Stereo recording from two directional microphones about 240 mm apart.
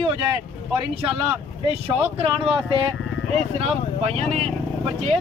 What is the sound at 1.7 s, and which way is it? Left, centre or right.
Speech, right.